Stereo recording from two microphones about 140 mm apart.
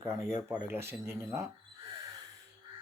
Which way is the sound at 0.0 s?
20° right (ahead or behind).